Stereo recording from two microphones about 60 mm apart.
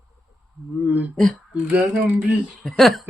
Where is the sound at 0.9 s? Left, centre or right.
Right.